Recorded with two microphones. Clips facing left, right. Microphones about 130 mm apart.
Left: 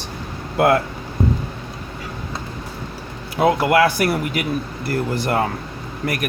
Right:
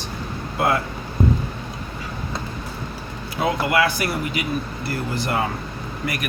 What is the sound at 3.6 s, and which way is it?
Speech, 55° left (ahead or behind).